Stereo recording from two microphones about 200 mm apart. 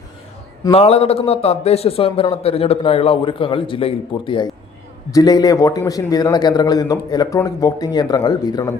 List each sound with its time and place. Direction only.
0.7 s a man's voice: 30° left (ahead or behind)